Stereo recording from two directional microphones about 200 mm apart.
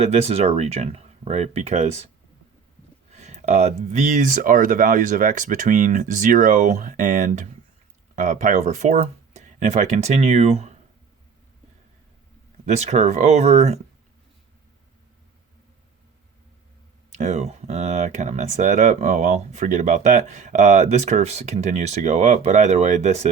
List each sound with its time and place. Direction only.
0.0 s speech: 30° right (ahead or behind)
3.1 s speech: 35° right (ahead or behind)
12.6 s speech: 35° right (ahead or behind)
17.1 s speech: 35° right (ahead or behind)